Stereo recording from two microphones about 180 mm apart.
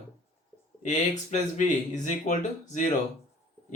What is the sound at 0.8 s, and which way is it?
Speech, 45° left (ahead or behind).